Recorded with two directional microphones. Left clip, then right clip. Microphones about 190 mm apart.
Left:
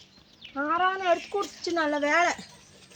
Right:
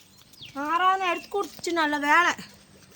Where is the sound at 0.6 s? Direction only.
20° right (ahead or behind).